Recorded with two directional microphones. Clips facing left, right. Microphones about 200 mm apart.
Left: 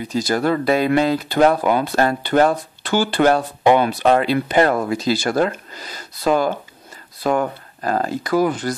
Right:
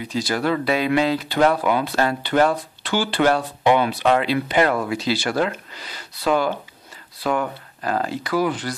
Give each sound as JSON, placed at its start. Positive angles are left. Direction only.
{"t": 0.0, "sound": "speech", "side_deg": 45}